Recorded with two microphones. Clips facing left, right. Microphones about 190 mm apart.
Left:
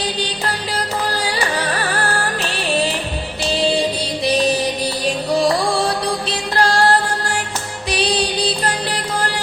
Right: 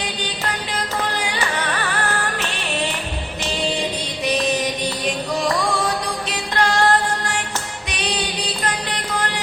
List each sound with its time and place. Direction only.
0.0 s music: 35° left (ahead or behind)
4.2 s music: 35° left (ahead or behind)
7.9 s music: 35° left (ahead or behind)